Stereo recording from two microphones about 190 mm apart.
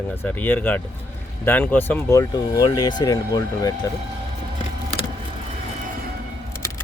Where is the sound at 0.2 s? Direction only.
10° left (ahead or behind).